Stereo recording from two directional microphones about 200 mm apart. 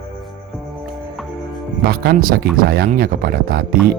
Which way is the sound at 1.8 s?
50° right (ahead or behind).